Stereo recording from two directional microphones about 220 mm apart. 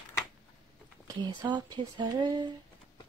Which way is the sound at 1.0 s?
20° right (ahead or behind).